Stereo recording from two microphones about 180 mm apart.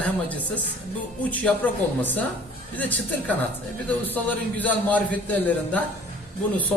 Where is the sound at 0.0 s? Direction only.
10° left (ahead or behind).